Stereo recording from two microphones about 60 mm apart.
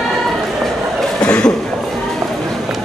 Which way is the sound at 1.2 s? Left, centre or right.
Centre.